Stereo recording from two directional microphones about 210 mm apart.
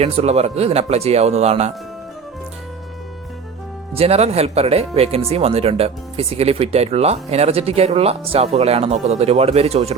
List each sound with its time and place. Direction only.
0.0 s speech: 30° right (ahead or behind)
3.9 s speech: 30° right (ahead or behind)